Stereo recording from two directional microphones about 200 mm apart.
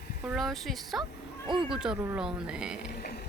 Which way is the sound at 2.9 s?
55° left (ahead or behind).